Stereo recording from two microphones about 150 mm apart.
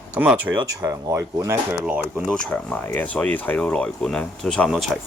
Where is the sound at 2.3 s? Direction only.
5° left (ahead or behind).